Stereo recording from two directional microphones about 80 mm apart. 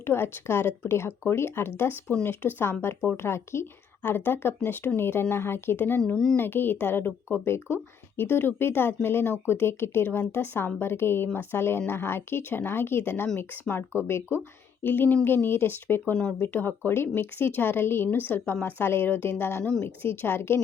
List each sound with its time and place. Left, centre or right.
0.0 s speech: left